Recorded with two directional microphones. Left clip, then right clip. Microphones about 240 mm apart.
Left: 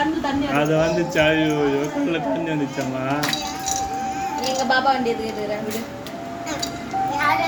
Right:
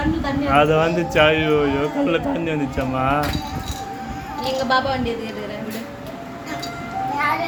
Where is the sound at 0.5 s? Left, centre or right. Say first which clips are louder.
Right 4 dB; right.